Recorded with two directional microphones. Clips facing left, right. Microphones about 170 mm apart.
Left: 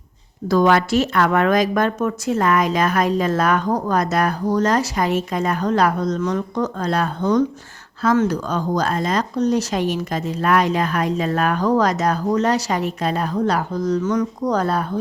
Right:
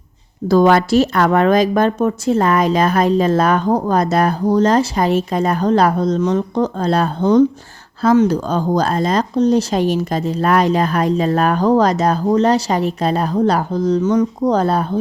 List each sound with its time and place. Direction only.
0.4 s a woman's voice: 30° right (ahead or behind)